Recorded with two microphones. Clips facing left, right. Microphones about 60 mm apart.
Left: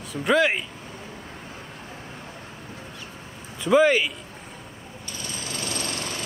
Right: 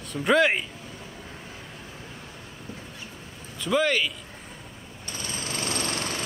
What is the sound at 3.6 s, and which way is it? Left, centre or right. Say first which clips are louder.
Speech: left 5 dB; centre.